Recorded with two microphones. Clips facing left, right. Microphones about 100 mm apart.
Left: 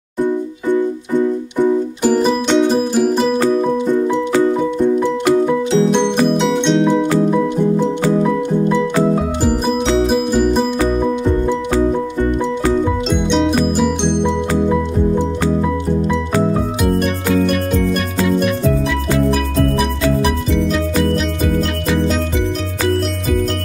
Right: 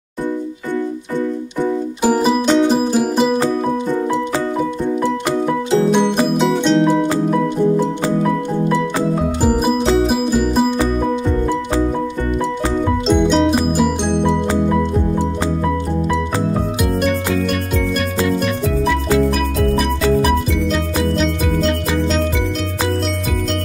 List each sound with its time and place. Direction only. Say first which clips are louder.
2.0 s music: even; 5° right (ahead or behind)
5.9 s music: left 1 dB; 5° right (ahead or behind)
10.0 s music: left 2 dB; 5° right (ahead or behind)
13.1 s music: right 4 dB; 5° right (ahead or behind)
18.2 s music: left 4 dB; centre (ahead or behind)